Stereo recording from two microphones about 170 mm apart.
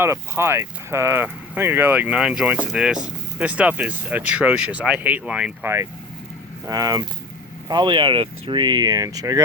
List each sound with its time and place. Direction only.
0.0 s speech: 15° right (ahead or behind)